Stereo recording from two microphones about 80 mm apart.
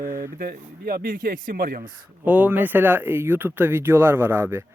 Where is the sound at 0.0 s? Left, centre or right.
Right.